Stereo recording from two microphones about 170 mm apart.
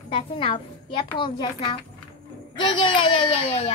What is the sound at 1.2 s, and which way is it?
A child's voice, 30° left (ahead or behind).